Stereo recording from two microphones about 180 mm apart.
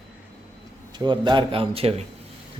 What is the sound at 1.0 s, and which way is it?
A man's voice, 25° right (ahead or behind).